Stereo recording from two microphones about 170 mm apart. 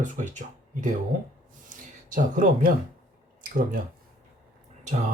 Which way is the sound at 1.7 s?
50° right (ahead or behind).